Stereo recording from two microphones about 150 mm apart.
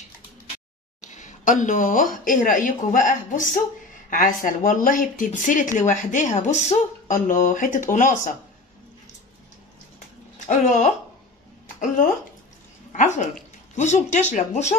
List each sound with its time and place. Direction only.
1.0 s speech: 55° left (ahead or behind)
10.5 s speech: 55° left (ahead or behind)
12.9 s speech: 55° left (ahead or behind)